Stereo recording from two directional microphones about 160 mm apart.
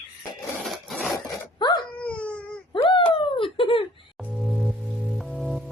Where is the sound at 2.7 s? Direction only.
35° left (ahead or behind).